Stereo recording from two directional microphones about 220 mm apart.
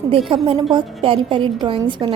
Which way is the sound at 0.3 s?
25° right (ahead or behind).